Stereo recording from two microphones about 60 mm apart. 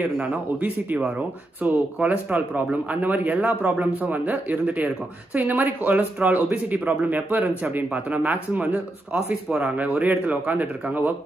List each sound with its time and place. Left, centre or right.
0.0 s speech: right
9.3 s speech: centre